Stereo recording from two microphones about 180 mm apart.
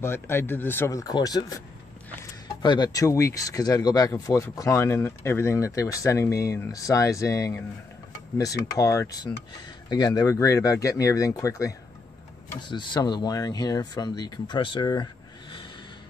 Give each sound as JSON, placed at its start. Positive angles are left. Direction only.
{"t": 0.0, "sound": "speech", "side_deg": 15}
{"t": 2.6, "sound": "speech", "side_deg": 25}
{"t": 8.7, "sound": "speech", "side_deg": 20}